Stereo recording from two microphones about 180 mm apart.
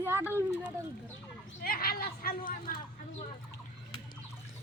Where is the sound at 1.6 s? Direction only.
55° left (ahead or behind).